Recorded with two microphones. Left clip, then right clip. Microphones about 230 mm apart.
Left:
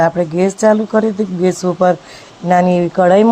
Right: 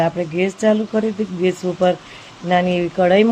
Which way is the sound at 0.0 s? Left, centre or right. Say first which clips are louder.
Left 5 dB; centre.